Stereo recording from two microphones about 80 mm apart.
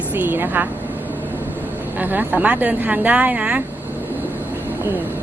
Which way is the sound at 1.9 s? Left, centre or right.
Right.